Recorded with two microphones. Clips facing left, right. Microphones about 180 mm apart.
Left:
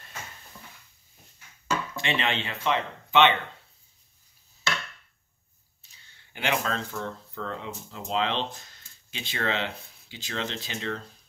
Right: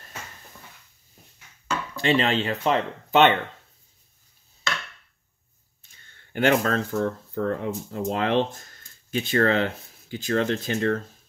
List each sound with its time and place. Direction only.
2.0 s speech: 40° right (ahead or behind)
5.8 s speech: 50° right (ahead or behind)